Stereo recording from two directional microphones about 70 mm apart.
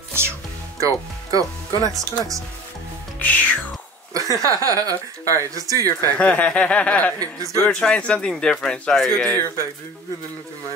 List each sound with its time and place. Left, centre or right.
0.7 s speech: right
3.2 s music: left
4.1 s speech: right
6.1 s speech: centre
7.2 s speech: right
7.6 s speech: centre